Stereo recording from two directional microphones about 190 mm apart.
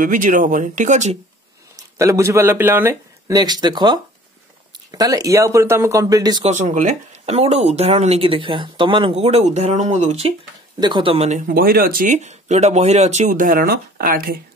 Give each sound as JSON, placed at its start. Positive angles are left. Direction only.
{"t": 0.0, "sound": "speech", "side_deg": -45}
{"t": 2.0, "sound": "speech", "side_deg": -15}
{"t": 6.4, "sound": "speech", "side_deg": -40}
{"t": 10.8, "sound": "speech", "side_deg": -25}